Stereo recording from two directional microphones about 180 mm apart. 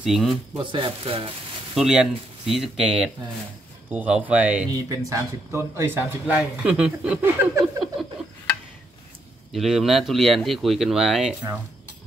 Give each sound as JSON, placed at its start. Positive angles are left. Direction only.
{"t": 0.0, "sound": "speech", "side_deg": 0}
{"t": 0.6, "sound": "speech", "side_deg": -30}
{"t": 1.8, "sound": "speech", "side_deg": 0}
{"t": 4.8, "sound": "speech", "side_deg": -20}
{"t": 9.5, "sound": "speech", "side_deg": 0}